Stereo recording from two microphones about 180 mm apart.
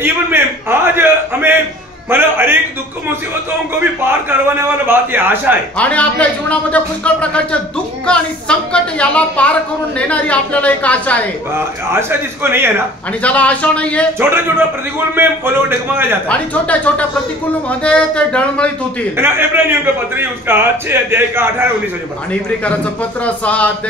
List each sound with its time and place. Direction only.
0.0 s a sound: 15° right (ahead or behind)
2.0 s a man's voice: 10° right (ahead or behind)
3.8 s a man's voice: 10° right (ahead or behind)
5.8 s a woman's voice: 10° left (ahead or behind)
11.5 s a man's voice: 15° right (ahead or behind)
13.2 s a woman's voice: 10° left (ahead or behind)
15.0 s a man's voice: 10° right (ahead or behind)
16.3 s a woman's voice: 10° left (ahead or behind)
19.1 s a man's voice: 10° right (ahead or behind)
23.2 s a woman's voice: 10° left (ahead or behind)